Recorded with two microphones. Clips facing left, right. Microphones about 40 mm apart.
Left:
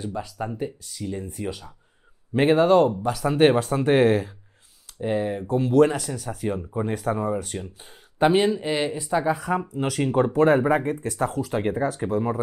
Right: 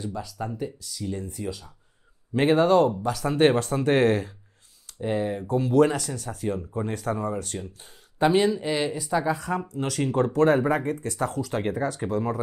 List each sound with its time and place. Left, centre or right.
0.0 s speech: centre
1.0 s speech: centre
1.4 s speech: left
2.3 s speech: centre
8.2 s speech: left
8.5 s speech: centre